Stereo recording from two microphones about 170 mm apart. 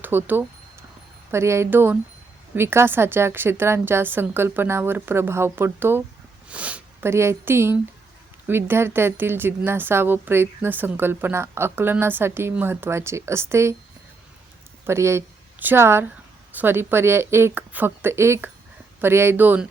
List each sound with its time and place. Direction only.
0.0 s a woman's voice: 10° right (ahead or behind)
14.8 s a woman's voice: 15° right (ahead or behind)